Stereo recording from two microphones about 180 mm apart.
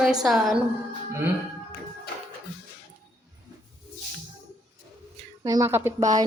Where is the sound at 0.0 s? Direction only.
Centre (ahead or behind).